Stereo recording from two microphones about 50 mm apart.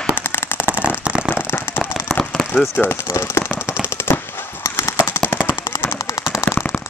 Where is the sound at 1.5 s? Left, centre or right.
Left.